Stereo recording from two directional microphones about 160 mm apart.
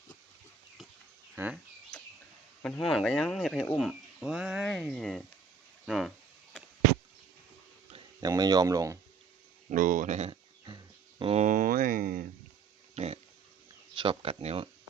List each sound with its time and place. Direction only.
1.4 s speech: 10° right (ahead or behind)
2.6 s speech: 10° left (ahead or behind)
8.2 s speech: 25° right (ahead or behind)
9.6 s speech: 55° right (ahead or behind)
10.7 s a sound: 30° right (ahead or behind)
11.4 s speech: 55° right (ahead or behind)
12.9 s a sound: 40° right (ahead or behind)
13.9 s speech: 30° right (ahead or behind)